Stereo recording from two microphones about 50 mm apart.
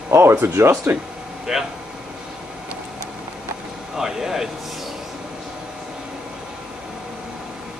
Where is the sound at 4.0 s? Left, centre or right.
Centre.